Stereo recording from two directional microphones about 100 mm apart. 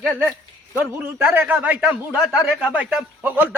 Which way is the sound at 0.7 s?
20° right (ahead or behind).